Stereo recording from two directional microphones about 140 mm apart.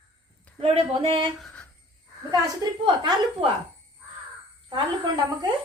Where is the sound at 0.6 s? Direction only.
45° right (ahead or behind).